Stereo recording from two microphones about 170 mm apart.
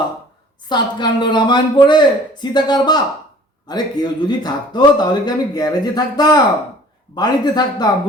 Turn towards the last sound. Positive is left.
turn(degrees=25)  # may be behind; listen again after turning